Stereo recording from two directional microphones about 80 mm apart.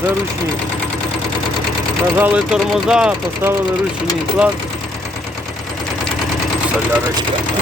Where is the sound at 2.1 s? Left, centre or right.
Centre.